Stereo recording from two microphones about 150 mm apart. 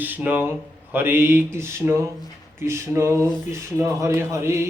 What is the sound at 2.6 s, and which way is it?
Speech, 20° right (ahead or behind).